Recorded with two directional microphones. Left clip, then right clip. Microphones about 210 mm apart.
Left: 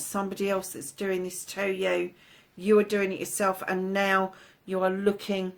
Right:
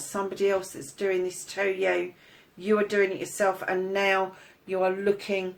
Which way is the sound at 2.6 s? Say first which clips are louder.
Left 1 dB; 45° left (ahead or behind).